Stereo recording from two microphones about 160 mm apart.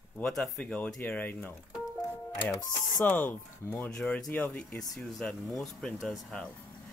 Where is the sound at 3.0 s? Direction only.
10° left (ahead or behind).